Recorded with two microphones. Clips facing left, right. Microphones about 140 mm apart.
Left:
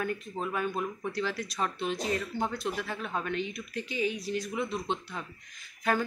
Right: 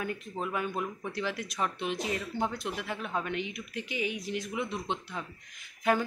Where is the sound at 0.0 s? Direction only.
15° right (ahead or behind).